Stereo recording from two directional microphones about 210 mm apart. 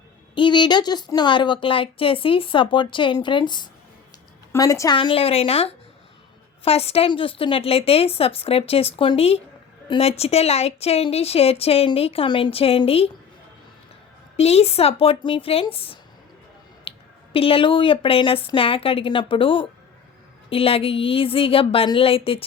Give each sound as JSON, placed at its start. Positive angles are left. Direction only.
{"t": 0.3, "sound": "speech", "side_deg": 20}
{"t": 14.3, "sound": "speech", "side_deg": 30}
{"t": 16.9, "sound": "a sound", "side_deg": 25}
{"t": 17.3, "sound": "speech", "side_deg": 25}